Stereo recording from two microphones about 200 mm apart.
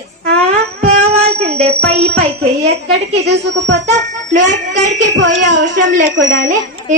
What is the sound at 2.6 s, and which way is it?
A woman's voice, 55° right (ahead or behind).